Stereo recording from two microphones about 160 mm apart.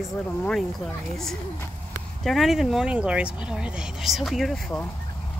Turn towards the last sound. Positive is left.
turn(degrees=5)  # may be behind; listen again after turning